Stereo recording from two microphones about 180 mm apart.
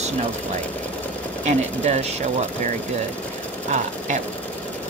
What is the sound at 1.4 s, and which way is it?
Speech, 40° right (ahead or behind).